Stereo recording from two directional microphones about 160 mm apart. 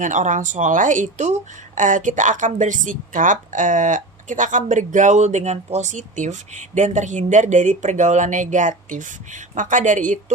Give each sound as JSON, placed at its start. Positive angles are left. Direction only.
{"t": 0.0, "sound": "a woman's voice", "side_deg": -50}